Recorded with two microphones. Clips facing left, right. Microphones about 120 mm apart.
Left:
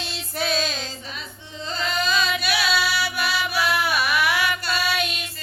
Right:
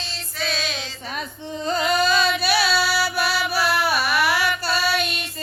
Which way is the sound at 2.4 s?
35° right (ahead or behind).